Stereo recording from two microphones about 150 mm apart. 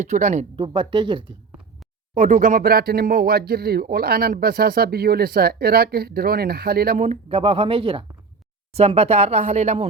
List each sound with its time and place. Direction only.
0.0 s speech: 50° right (ahead or behind)
0.5 s speech: 35° right (ahead or behind)
2.1 s speech: 60° right (ahead or behind); by 7.0 s 85° right
7.0 s speech: 45° right (ahead or behind)